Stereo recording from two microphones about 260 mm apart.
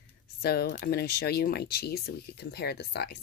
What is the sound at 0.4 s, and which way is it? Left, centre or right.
Speech, left.